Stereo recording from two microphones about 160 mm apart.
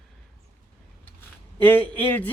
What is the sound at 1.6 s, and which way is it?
Speech, 10° left (ahead or behind).